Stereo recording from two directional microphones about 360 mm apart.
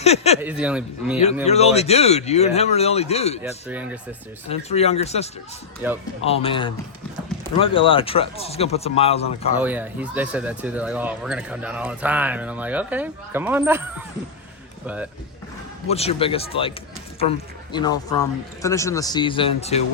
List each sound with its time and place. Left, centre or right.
0.0 s a man's voice: centre
0.4 s speech: centre
1.5 s a man's voice: centre
3.4 s speech: centre
4.4 s a man's voice: centre
9.6 s speech: centre
15.9 s a man's voice: centre